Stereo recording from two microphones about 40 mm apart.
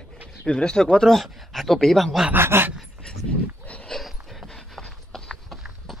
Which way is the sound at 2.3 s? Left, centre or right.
Right.